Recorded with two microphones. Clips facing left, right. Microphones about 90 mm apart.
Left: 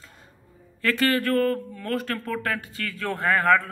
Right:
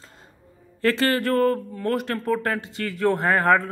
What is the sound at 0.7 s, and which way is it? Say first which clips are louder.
Speech: right 2 dB; 30° right (ahead or behind).